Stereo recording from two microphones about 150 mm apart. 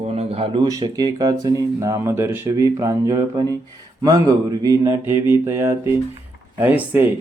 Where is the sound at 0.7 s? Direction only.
25° right (ahead or behind).